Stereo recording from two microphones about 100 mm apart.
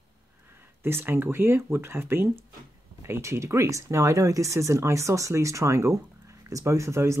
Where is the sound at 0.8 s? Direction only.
25° right (ahead or behind).